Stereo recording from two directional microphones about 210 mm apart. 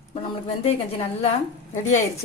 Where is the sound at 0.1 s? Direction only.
30° left (ahead or behind).